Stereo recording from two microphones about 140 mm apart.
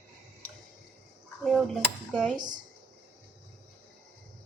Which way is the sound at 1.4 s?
5° left (ahead or behind).